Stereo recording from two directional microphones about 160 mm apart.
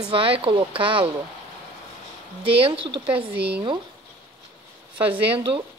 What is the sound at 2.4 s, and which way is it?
Speech, 35° right (ahead or behind).